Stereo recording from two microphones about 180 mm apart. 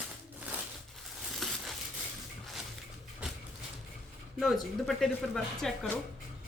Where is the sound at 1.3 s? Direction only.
Centre (ahead or behind).